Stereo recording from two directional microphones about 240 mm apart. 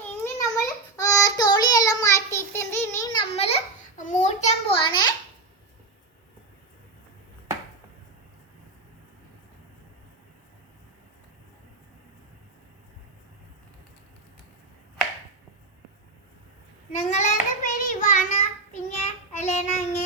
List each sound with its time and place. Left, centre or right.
0.5 s child singing: centre
16.9 s child singing: left